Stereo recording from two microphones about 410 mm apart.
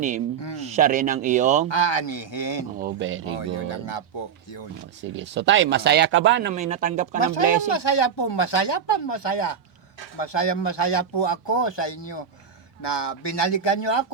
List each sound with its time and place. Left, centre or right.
0.6 s speech: centre
1.7 s speech: left
2.7 s speech: right
3.2 s speech: left
4.9 s speech: right
7.7 s speech: left
12.8 s speech: left